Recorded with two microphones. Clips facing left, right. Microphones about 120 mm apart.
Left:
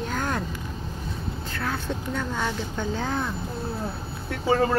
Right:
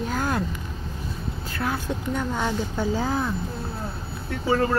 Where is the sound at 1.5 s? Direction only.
15° right (ahead or behind).